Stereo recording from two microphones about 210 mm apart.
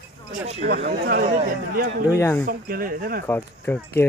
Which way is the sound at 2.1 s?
10° left (ahead or behind).